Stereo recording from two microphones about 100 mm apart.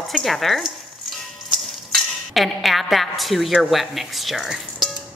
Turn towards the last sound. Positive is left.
turn(degrees=0)  # may be behind; listen again after turning